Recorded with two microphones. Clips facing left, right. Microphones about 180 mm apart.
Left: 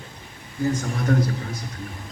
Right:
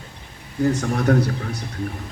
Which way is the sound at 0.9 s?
65° right (ahead or behind).